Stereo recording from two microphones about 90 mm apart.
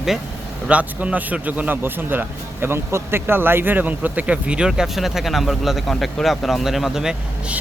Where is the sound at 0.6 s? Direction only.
15° right (ahead or behind).